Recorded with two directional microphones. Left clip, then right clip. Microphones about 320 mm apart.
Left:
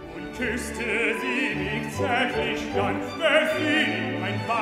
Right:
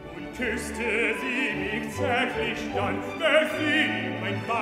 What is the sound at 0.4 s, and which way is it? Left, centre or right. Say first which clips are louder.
Opera: even; centre.